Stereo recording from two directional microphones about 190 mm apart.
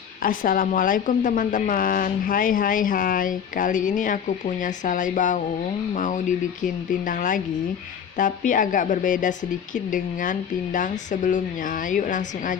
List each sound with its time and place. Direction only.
0.2 s a woman's voice: 45° left (ahead or behind)